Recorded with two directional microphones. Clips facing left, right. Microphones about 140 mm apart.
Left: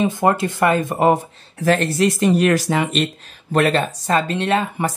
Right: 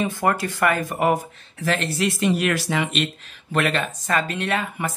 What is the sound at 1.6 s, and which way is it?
Speech, 40° left (ahead or behind).